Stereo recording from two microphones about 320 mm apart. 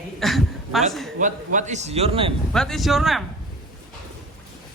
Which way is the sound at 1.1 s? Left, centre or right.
Right.